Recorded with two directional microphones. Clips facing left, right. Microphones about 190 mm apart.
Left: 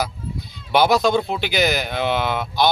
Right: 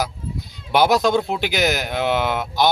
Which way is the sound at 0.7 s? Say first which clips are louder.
Even; 15° right (ahead or behind).